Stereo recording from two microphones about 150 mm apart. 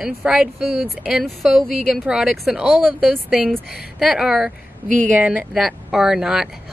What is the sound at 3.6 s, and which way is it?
Speech, 90° left.